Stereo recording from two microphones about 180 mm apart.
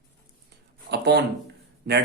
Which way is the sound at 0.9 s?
65° right (ahead or behind).